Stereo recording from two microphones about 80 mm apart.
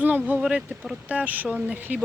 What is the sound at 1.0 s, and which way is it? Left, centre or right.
Speech, centre.